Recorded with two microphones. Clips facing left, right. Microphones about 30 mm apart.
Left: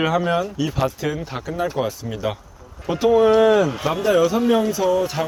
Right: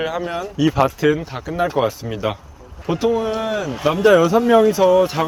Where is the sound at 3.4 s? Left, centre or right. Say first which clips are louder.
Left 8 dB; centre.